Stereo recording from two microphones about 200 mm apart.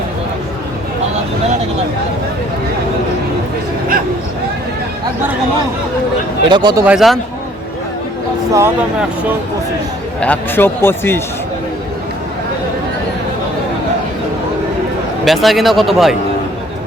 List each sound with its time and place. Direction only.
6.5 s speech: 20° right (ahead or behind)
6.8 s speech: centre (ahead or behind)
8.5 s speech: 10° right (ahead or behind)
10.2 s speech: 10° left (ahead or behind)
15.2 s speech: centre (ahead or behind)